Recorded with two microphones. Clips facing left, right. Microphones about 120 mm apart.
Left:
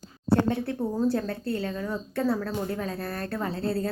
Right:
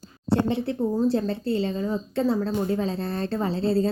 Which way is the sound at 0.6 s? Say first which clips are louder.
Right 3 dB; 20° right (ahead or behind).